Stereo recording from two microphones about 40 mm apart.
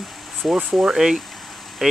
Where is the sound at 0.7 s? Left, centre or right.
Right.